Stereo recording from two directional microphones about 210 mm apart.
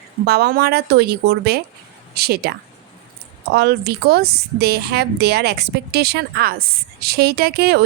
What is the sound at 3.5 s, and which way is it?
A woman's voice, 50° right (ahead or behind).